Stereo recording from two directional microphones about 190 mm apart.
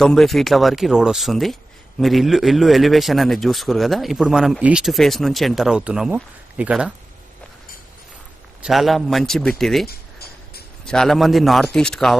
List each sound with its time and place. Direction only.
0.0 s speech: centre (ahead or behind)
8.6 s speech: centre (ahead or behind)
9.8 s a sound: 55° left (ahead or behind)
10.9 s speech: centre (ahead or behind)